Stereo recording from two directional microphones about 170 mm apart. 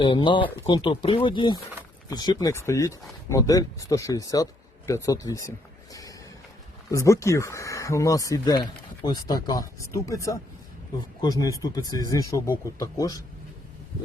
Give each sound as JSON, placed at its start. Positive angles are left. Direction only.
{"t": 0.0, "sound": "speech", "side_deg": 30}
{"t": 5.9, "sound": "a sound", "side_deg": 20}
{"t": 6.9, "sound": "speech", "side_deg": 15}